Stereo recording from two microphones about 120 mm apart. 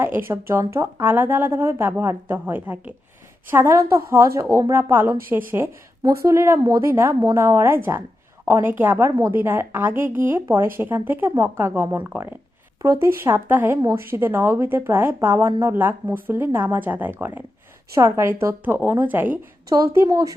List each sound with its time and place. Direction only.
0.0 s a woman's voice: 20° right (ahead or behind)
6.0 s a woman's voice: 30° right (ahead or behind)
19.7 s a woman's voice: 25° right (ahead or behind)